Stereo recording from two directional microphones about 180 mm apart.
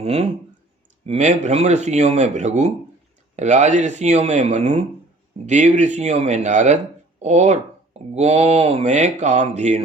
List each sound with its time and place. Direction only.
0.0 s speech: 35° right (ahead or behind)